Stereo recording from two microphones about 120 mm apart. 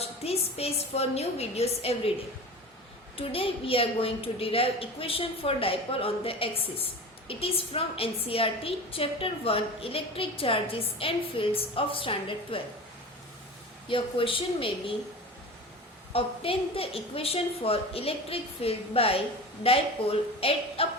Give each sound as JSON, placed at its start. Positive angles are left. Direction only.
{"t": 0.0, "sound": "a woman's voice", "side_deg": 55}
{"t": 3.2, "sound": "a woman's voice", "side_deg": 50}
{"t": 13.8, "sound": "a woman's voice", "side_deg": 45}
{"t": 16.1, "sound": "a woman's voice", "side_deg": 50}